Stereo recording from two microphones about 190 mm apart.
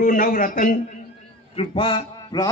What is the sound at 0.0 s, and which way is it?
Speech, 45° left (ahead or behind).